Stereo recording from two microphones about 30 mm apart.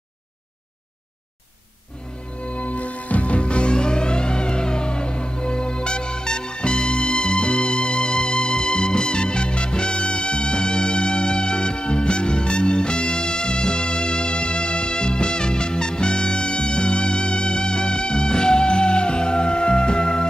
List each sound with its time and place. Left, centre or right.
2.4 s music: left